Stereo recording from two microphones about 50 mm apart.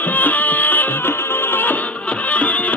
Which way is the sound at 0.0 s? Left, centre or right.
Left.